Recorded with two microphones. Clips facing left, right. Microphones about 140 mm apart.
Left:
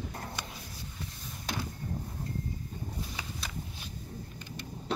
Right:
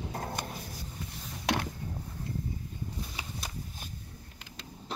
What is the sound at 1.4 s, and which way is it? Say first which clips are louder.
Mechanisms: right 6 dB; 80° right.